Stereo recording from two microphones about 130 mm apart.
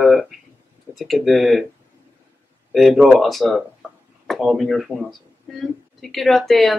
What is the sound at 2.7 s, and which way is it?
Speech, centre (ahead or behind).